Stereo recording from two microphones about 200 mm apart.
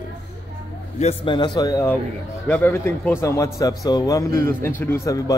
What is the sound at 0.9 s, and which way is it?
A man's voice, 30° left (ahead or behind).